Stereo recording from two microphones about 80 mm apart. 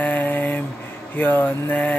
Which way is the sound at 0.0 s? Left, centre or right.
Left.